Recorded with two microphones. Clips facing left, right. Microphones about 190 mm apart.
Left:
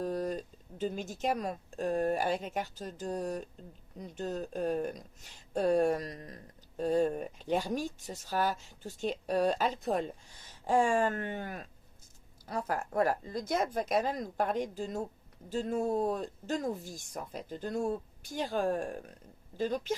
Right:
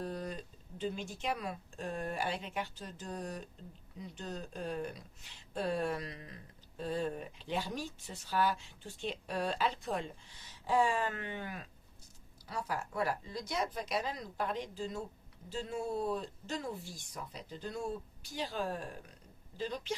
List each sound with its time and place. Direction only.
0.0 s speech: 45° left (ahead or behind)